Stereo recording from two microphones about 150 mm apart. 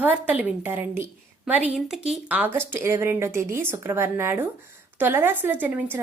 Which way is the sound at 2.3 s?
10° right (ahead or behind).